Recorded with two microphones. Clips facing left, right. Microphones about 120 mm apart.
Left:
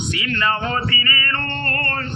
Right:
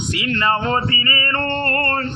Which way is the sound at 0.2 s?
35° right (ahead or behind).